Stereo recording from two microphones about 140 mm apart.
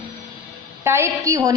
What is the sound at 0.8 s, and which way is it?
Speech, 15° right (ahead or behind).